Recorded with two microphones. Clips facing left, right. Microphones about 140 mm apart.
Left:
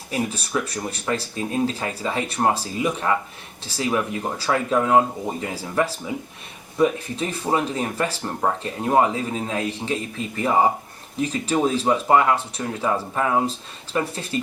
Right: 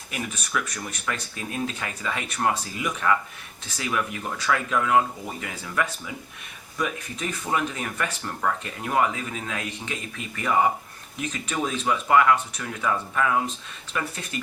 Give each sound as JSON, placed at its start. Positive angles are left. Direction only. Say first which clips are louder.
{"t": 0.1, "sound": "speech", "louder": "left 6 dB", "side_deg": 30}